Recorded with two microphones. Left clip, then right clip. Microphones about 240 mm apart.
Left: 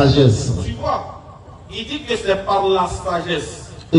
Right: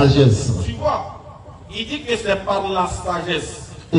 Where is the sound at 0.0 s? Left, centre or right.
Right.